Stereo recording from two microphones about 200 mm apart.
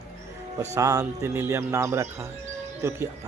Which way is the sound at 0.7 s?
15° right (ahead or behind).